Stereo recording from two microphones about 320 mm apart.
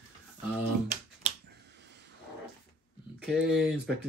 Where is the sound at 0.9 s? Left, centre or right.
Right.